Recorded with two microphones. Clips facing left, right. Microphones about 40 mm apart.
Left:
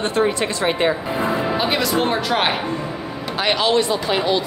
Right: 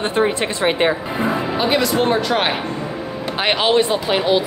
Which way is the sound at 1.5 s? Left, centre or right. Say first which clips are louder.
Right 2 dB; centre.